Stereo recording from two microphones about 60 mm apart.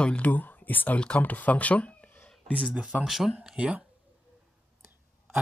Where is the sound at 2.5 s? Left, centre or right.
Centre.